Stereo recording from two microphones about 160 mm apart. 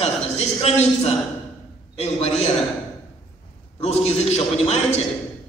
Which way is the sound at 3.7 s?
40° left (ahead or behind).